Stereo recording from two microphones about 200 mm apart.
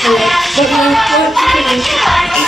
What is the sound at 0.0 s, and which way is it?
Music, centre (ahead or behind).